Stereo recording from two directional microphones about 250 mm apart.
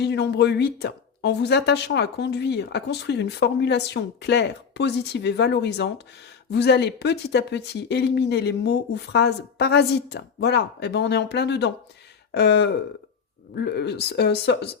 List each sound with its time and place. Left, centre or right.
0.0 s a woman's voice: left